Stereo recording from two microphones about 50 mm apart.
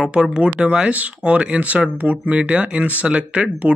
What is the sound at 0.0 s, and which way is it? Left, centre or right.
Speech, centre.